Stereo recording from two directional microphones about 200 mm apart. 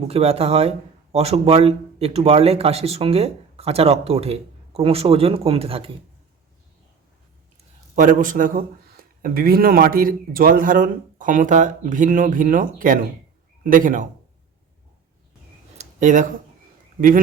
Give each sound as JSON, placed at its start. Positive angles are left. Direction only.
{"t": 0.1, "sound": "a man's voice", "side_deg": -30}
{"t": 7.9, "sound": "a man's voice", "side_deg": -40}
{"t": 15.8, "sound": "a sound", "side_deg": -40}